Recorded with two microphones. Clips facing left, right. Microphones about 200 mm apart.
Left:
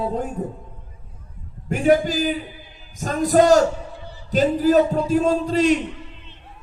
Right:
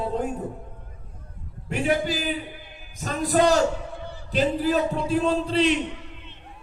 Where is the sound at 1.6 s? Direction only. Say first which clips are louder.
Left 6 dB; 45° left (ahead or behind).